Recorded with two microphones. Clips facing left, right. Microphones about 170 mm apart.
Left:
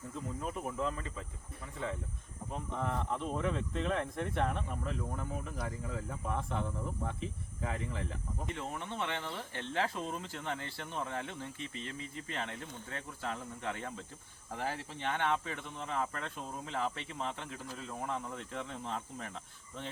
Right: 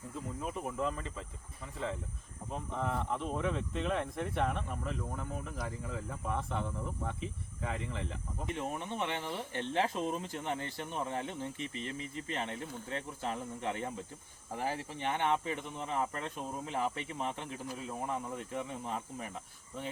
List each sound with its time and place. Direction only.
0.4 s speech: centre (ahead or behind)
8.4 s speech: 20° right (ahead or behind)